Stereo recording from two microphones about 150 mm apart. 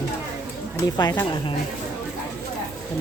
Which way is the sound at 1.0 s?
25° left (ahead or behind).